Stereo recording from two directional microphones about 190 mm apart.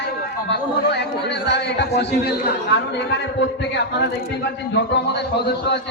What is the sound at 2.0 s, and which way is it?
A man's voice, 60° left (ahead or behind).